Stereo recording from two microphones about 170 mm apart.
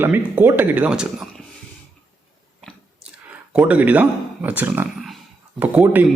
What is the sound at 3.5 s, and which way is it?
Speech, 10° right (ahead or behind).